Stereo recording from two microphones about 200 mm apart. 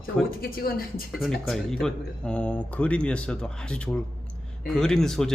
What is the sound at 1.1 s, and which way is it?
Speech, centre (ahead or behind).